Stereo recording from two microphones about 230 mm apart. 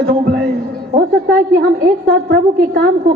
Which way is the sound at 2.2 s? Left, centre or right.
Right.